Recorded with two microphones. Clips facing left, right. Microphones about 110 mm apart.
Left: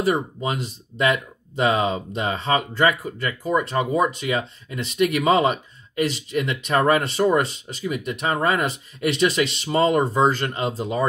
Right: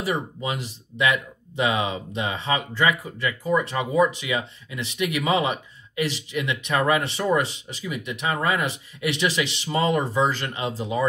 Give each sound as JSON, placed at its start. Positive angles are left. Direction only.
{"t": 0.0, "sound": "speech", "side_deg": 40}
{"t": 1.7, "sound": "speech", "side_deg": 50}